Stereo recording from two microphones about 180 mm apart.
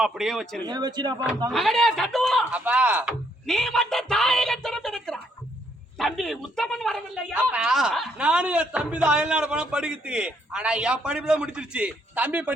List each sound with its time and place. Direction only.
0.0 s speech: centre (ahead or behind)
0.6 s speech: 25° right (ahead or behind)
1.5 s speech: centre (ahead or behind)
2.6 s speech: 10° right (ahead or behind)